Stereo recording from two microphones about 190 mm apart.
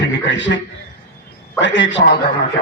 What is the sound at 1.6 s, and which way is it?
Speech, 70° left (ahead or behind).